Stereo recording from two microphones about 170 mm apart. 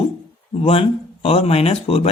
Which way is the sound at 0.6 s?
35° left (ahead or behind).